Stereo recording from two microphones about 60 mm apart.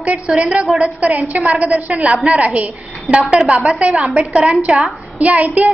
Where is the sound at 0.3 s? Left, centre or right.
Centre.